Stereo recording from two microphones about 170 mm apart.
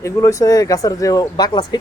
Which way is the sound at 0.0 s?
20° left (ahead or behind).